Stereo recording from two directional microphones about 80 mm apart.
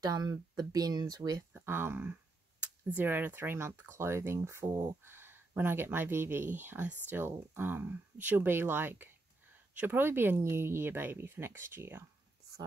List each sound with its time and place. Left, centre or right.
0.0 s speech: right
1.5 s speech: right